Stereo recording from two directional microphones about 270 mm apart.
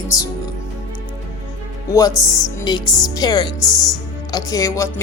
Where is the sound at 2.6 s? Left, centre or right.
Centre.